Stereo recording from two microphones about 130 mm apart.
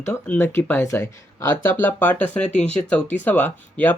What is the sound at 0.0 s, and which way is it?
Speech, 20° left (ahead or behind).